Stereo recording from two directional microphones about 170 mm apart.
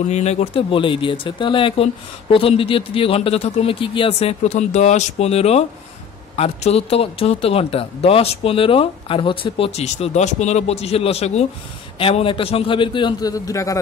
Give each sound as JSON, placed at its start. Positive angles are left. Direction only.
{"t": 0.1, "sound": "speech", "side_deg": 40}